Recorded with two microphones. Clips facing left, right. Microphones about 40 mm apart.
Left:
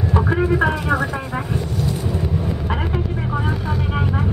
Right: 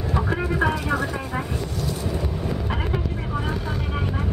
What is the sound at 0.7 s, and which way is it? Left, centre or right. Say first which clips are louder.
Speech: left 4 dB; centre.